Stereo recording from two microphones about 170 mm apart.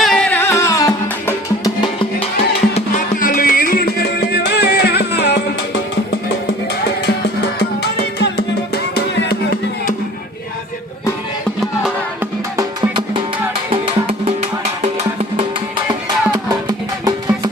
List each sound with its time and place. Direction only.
0.0 s music: 5° left (ahead or behind); by 1.9 s 20° left (ahead or behind)
3.2 s music: 55° left (ahead or behind); by 5.4 s 75° left (ahead or behind)
7.8 s music: 75° left (ahead or behind)
11.4 s music: centre (ahead or behind)
12.2 s music: 20° right (ahead or behind)
13.7 s music: 35° right (ahead or behind)
15.9 s music: 25° right (ahead or behind)